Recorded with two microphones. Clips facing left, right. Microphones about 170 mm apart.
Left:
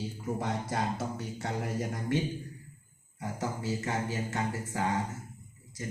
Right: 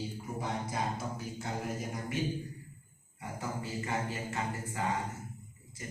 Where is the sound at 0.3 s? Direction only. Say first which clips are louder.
Left 2 dB; 90° left.